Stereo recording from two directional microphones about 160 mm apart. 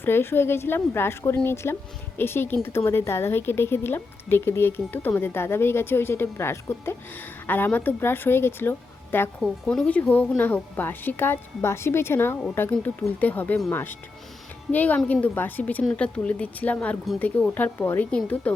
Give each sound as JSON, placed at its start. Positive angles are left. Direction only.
{"t": 0.0, "sound": "a woman's voice", "side_deg": 15}